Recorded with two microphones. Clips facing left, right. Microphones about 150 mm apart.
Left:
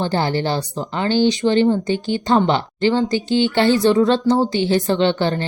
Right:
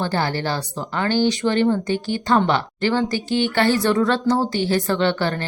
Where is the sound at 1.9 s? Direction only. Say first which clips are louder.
Left 2 dB; 45° right (ahead or behind).